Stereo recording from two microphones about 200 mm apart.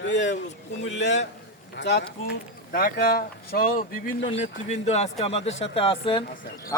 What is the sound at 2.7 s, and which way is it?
Speech, 50° left (ahead or behind).